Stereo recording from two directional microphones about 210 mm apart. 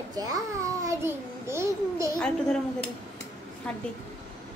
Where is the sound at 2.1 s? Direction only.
5° left (ahead or behind).